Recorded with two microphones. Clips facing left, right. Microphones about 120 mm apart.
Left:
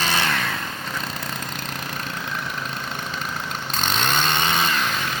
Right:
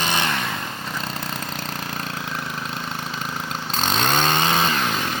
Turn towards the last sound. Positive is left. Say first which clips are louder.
# right 2 dB
turn(degrees=-35)  # may be behind; listen again after turning